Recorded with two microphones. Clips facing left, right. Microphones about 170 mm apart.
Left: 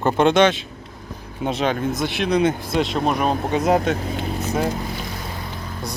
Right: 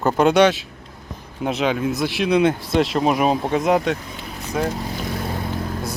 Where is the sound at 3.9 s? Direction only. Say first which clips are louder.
Left 8 dB; 60° left (ahead or behind).